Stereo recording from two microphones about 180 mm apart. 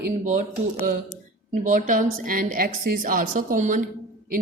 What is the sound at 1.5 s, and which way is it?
A woman's voice, 45° right (ahead or behind).